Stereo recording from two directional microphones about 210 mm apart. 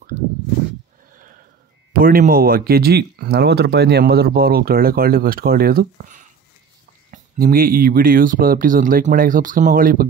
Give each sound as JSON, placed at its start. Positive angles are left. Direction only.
{"t": 2.0, "sound": "speech", "side_deg": -45}